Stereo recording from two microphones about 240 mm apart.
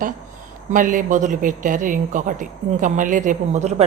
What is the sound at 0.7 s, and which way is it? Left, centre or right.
A woman's voice, right.